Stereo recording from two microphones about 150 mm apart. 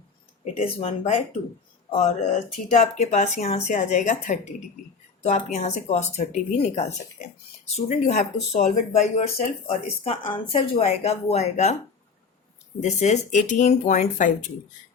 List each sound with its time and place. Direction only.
0.4 s speech: 40° left (ahead or behind)
12.8 s speech: 50° left (ahead or behind)